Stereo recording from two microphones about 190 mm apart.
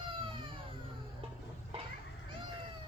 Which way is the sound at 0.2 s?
25° right (ahead or behind).